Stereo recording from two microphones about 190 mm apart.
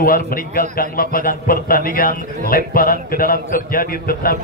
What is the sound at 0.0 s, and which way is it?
A man's voice, 50° left (ahead or behind).